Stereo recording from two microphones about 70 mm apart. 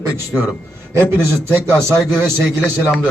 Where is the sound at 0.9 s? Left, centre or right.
Right.